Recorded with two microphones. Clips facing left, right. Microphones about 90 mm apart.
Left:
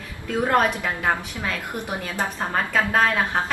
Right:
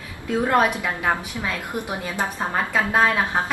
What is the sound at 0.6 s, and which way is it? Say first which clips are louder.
Speech: right 1 dB; 15° right (ahead or behind).